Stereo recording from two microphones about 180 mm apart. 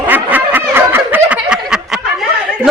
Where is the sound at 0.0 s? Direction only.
10° right (ahead or behind).